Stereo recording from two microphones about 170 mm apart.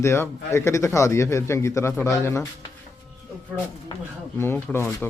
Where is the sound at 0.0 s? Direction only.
15° left (ahead or behind).